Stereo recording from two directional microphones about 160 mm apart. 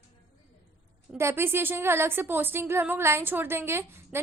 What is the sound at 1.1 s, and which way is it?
A woman's voice, 15° right (ahead or behind).